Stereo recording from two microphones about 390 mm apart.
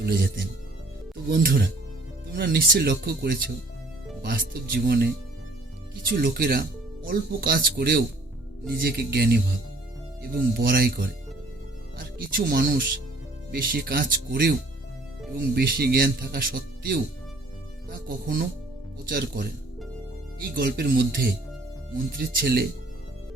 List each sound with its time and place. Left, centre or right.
0.0 s speech: right
1.3 s speech: right
6.1 s speech: right
11.9 s speech: right
20.5 s speech: right